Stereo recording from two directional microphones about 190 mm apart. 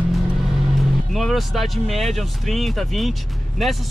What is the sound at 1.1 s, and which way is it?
Speech, centre (ahead or behind).